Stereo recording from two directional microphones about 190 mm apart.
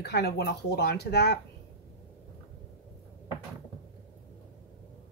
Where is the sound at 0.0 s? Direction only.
60° left (ahead or behind).